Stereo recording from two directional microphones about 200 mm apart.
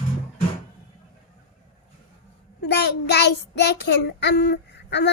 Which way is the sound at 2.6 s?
55° left (ahead or behind).